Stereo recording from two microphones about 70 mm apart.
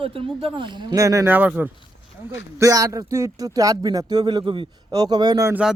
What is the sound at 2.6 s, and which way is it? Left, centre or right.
Speech, right.